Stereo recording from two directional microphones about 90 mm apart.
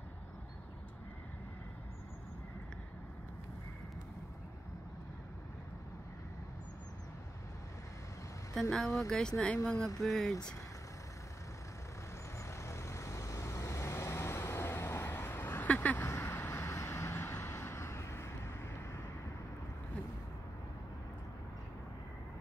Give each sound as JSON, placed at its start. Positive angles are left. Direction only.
{"t": 8.5, "sound": "speech", "side_deg": 5}
{"t": 12.4, "sound": "vehicle", "side_deg": 30}
{"t": 16.1, "sound": "vehicle", "side_deg": 25}